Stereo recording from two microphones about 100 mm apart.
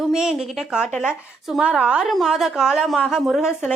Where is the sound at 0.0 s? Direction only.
5° right (ahead or behind).